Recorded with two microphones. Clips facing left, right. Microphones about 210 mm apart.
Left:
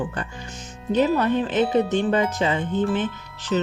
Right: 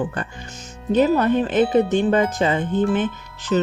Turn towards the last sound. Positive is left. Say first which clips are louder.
# right 3 dB
turn(degrees=-50)  # may be behind; listen again after turning